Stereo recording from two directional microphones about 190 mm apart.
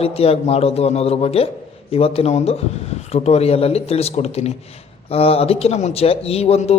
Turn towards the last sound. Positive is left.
turn(degrees=35)  # may be behind; listen again after turning